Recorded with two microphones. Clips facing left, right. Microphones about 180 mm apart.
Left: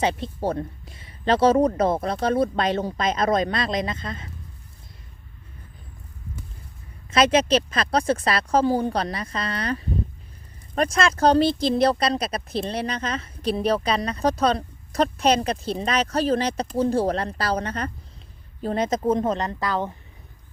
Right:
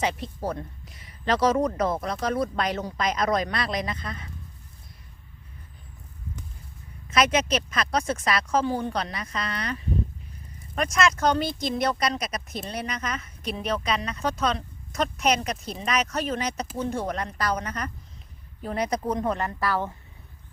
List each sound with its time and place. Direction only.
0.0 s speech: 30° left (ahead or behind)
7.1 s speech: 30° left (ahead or behind)